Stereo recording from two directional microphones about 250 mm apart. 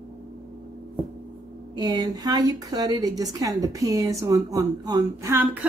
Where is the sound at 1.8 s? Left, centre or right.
Centre.